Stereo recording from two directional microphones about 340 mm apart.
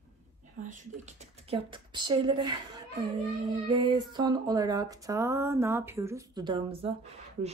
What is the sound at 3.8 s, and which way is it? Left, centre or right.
Speech, centre.